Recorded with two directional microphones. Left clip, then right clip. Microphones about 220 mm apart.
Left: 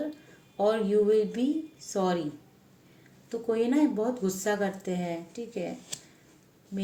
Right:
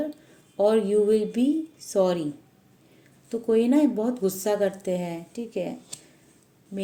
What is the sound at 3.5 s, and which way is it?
A woman's voice, 40° right (ahead or behind).